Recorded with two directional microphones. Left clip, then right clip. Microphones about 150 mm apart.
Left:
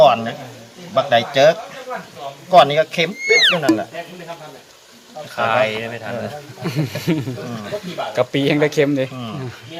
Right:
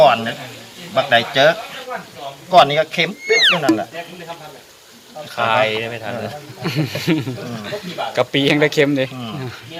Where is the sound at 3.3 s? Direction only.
Centre (ahead or behind).